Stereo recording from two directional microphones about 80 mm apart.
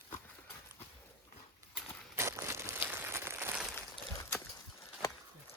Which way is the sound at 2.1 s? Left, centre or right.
Right.